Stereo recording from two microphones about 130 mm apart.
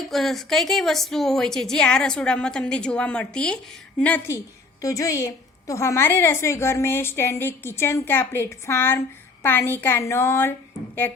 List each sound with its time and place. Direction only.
0.0 s a woman's voice: centre (ahead or behind)
4.8 s a woman's voice: 25° left (ahead or behind)